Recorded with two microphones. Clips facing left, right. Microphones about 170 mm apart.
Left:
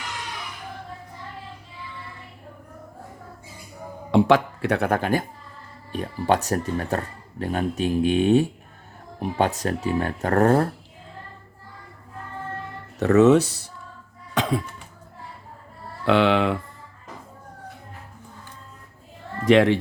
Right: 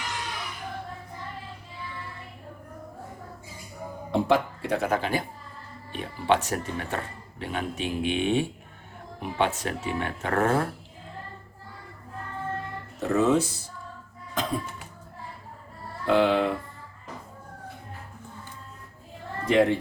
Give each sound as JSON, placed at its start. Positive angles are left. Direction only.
{"t": 4.1, "sound": "speech", "side_deg": 75}
{"t": 13.0, "sound": "speech", "side_deg": 75}
{"t": 14.4, "sound": "a sound", "side_deg": 80}
{"t": 16.0, "sound": "speech", "side_deg": 80}
{"t": 19.5, "sound": "speech", "side_deg": 90}